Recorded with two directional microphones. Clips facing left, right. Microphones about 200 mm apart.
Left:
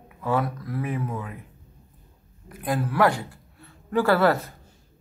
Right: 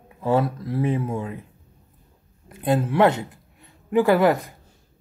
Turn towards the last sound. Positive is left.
turn(degrees=-15)  # may be behind; listen again after turning